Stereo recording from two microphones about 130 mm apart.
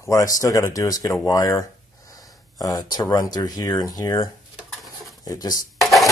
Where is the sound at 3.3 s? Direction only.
30° left (ahead or behind).